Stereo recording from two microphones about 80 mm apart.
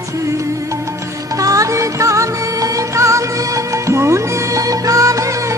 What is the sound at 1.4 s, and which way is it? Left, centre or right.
Music, right.